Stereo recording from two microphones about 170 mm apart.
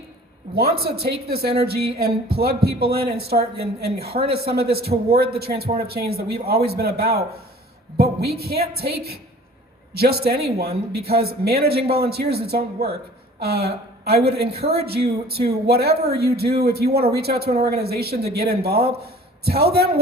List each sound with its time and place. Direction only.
0.5 s speech: 65° right (ahead or behind)
1.6 s a sound: 65° right (ahead or behind)
3.2 s speech: 65° right (ahead or behind)
4.1 s speech: 35° right (ahead or behind)
4.4 s a sound: 65° right (ahead or behind)
5.7 s speech: 65° right (ahead or behind)